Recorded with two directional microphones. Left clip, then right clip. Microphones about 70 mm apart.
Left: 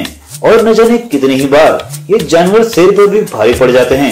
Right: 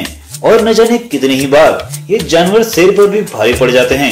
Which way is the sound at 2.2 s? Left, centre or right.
Left.